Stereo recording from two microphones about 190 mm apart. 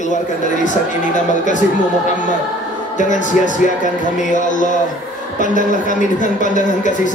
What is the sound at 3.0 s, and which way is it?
Speech, 40° left (ahead or behind).